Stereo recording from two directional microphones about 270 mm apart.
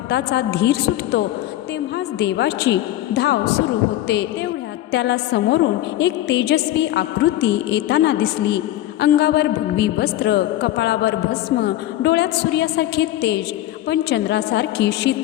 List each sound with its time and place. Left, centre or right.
0.1 s a woman's voice: left
4.9 s a woman's voice: left